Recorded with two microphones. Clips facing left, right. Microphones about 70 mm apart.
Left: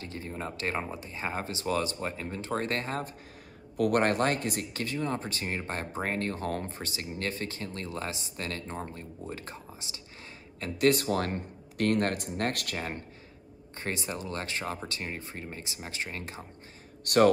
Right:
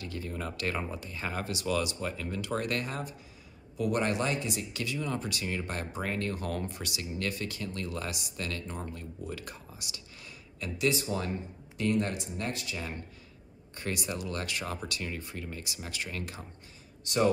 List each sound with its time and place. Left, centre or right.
0.0 s speech: left
3.7 s speech: left
10.6 s speech: left
13.7 s speech: left
17.0 s a man's voice: left